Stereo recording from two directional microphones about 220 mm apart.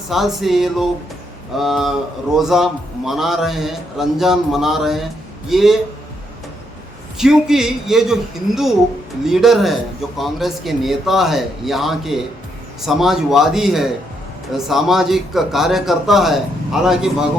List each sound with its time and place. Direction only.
0.1 s a man's voice: centre (ahead or behind)
7.2 s a man's voice: centre (ahead or behind)